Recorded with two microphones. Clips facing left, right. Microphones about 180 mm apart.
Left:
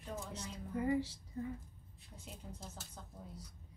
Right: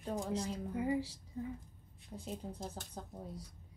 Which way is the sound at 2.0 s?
35° right (ahead or behind).